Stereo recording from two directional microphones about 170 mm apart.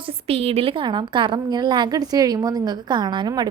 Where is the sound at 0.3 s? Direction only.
35° right (ahead or behind).